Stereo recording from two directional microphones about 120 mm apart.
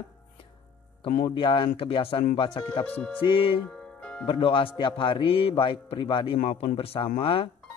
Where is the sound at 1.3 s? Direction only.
45° left (ahead or behind).